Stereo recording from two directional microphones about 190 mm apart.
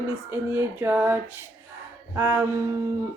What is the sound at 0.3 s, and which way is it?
A woman's voice, 10° right (ahead or behind).